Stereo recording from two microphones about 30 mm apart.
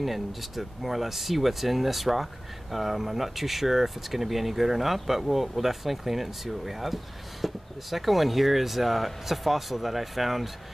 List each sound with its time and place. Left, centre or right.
0.0 s speech: centre